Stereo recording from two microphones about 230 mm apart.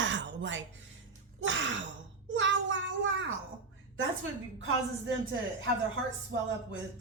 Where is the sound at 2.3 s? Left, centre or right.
Right.